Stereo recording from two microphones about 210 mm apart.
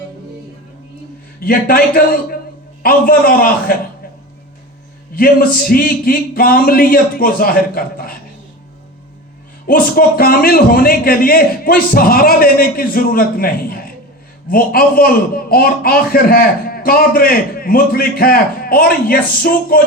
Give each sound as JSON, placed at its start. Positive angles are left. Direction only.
{"t": 1.4, "sound": "a man's voice", "side_deg": 45}
{"t": 5.1, "sound": "a man's voice", "side_deg": 45}
{"t": 9.6, "sound": "a man's voice", "side_deg": 45}